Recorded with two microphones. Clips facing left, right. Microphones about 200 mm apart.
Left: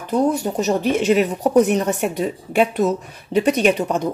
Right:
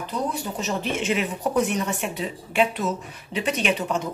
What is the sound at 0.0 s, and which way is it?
Speech, 50° left (ahead or behind).